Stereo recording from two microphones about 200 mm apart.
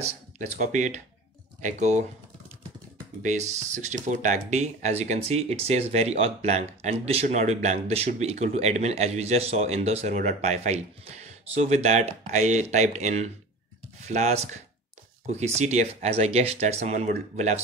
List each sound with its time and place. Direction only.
0.0 s speech: 35° right (ahead or behind)
3.2 s speech: 35° right (ahead or behind)